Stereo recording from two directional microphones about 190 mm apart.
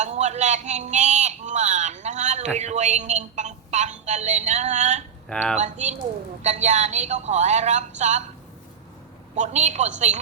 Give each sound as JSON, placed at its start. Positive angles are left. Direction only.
{"t": 0.0, "sound": "speech", "side_deg": -35}
{"t": 5.3, "sound": "speech", "side_deg": 5}
{"t": 5.5, "sound": "speech", "side_deg": -35}
{"t": 9.3, "sound": "speech", "side_deg": -35}